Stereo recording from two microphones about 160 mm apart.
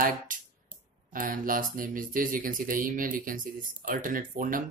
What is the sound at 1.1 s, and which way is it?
Speech, 60° right (ahead or behind).